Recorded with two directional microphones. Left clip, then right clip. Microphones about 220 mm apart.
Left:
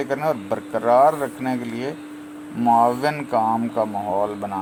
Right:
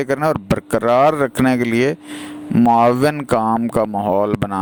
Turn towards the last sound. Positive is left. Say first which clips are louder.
# right 5 dB
turn(degrees=-50)  # may be behind; listen again after turning